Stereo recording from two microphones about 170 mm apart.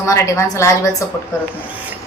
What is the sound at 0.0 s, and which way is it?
Speech, 15° left (ahead or behind).